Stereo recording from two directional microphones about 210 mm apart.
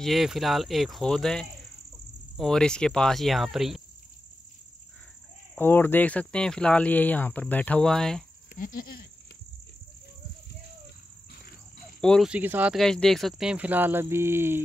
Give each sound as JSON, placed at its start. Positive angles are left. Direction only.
{"t": 0.0, "sound": "speech", "side_deg": 0}
{"t": 5.6, "sound": "speech", "side_deg": 10}
{"t": 8.5, "sound": "speech", "side_deg": 40}
{"t": 12.0, "sound": "speech", "side_deg": 0}